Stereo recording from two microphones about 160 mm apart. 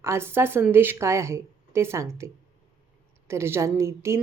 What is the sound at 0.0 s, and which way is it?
Speech, 15° right (ahead or behind).